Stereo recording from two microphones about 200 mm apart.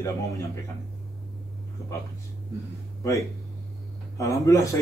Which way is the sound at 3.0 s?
15° left (ahead or behind).